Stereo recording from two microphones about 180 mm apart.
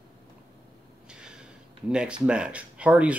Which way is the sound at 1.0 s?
5° right (ahead or behind).